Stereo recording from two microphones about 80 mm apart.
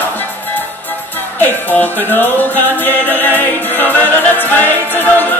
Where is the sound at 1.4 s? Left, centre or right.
Left.